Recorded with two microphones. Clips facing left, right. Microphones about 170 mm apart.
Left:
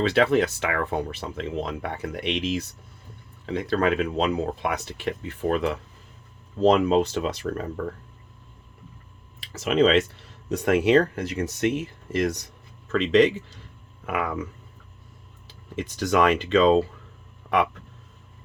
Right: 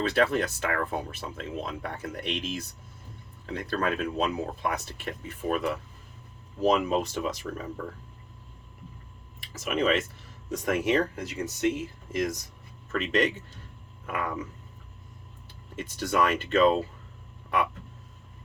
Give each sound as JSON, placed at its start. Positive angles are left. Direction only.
{"t": 0.1, "sound": "speech", "side_deg": 70}
{"t": 9.4, "sound": "speech", "side_deg": 75}
{"t": 12.9, "sound": "speech", "side_deg": 90}
{"t": 15.4, "sound": "speech", "side_deg": 90}